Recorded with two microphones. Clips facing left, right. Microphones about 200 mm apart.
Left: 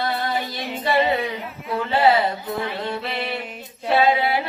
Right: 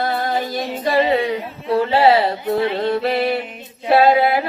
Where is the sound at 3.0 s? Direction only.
45° right (ahead or behind).